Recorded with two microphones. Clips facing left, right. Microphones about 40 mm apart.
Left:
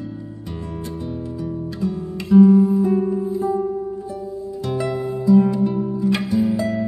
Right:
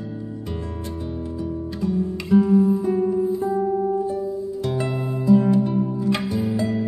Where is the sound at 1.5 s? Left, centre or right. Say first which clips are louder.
Even; centre.